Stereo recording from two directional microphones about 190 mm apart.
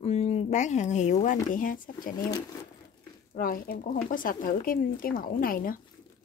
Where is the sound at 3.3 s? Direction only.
50° left (ahead or behind).